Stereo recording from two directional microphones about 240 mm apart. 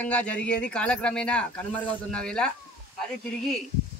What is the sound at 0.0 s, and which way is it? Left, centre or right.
Speech, centre.